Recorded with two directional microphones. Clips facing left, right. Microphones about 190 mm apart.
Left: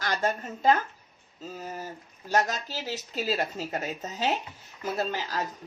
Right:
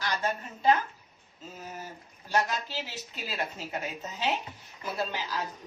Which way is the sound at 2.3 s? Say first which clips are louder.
Left 2 dB; 40° left (ahead or behind).